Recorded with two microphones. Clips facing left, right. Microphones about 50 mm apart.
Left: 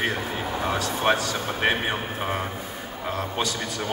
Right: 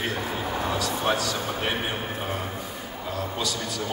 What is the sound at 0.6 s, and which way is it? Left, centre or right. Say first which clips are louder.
A man's voice: left 4 dB; left.